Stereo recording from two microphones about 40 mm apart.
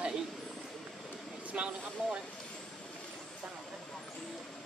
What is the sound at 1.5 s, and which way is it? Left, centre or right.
Speech, right.